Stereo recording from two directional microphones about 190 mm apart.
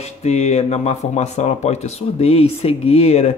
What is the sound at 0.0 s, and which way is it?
Speech, 35° left (ahead or behind).